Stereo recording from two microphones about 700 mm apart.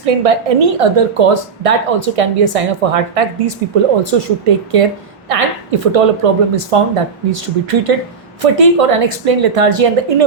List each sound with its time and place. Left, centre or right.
0.0 s a woman's voice: right